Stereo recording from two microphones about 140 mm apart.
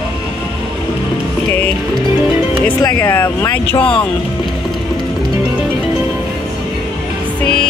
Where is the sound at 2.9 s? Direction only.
15° left (ahead or behind).